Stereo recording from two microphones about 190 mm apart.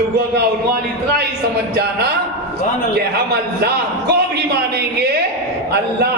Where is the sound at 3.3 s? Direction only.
60° right (ahead or behind).